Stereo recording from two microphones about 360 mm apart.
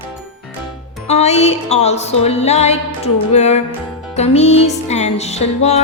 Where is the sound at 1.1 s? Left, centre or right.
Centre.